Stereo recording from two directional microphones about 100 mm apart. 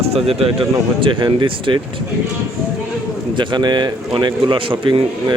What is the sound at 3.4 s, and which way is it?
A man's voice, 45° right (ahead or behind).